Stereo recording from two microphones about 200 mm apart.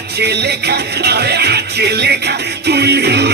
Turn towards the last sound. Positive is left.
turn(degrees=-55)  # may be behind; listen again after turning